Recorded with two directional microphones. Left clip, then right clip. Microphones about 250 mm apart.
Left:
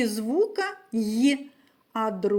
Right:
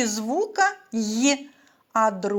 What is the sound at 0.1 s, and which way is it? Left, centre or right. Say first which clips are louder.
Speech: left 1 dB; centre.